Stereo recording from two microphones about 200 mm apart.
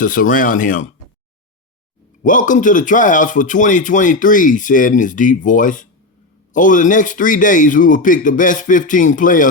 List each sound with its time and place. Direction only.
0.0 s speech: 40° left (ahead or behind)
2.2 s speech: 40° left (ahead or behind)